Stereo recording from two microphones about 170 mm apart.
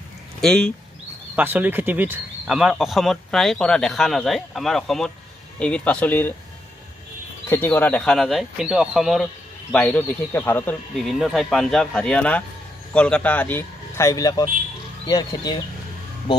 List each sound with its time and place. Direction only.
0.4 s speech: 5° left (ahead or behind)
1.3 s a man's voice: 10° right (ahead or behind); by 6.3 s 10° left (ahead or behind)
7.4 s speech: 15° left (ahead or behind)
11.1 s a man's voice: centre (ahead or behind); by 15.6 s 25° left (ahead or behind)